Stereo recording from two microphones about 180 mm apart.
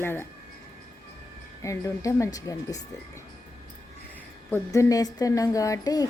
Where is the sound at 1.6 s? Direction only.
15° left (ahead or behind).